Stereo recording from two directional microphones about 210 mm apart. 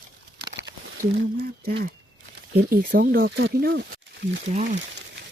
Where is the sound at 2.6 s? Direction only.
45° right (ahead or behind).